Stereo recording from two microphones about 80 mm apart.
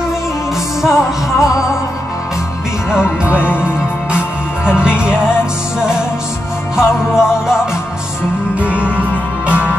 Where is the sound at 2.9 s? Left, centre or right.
Centre.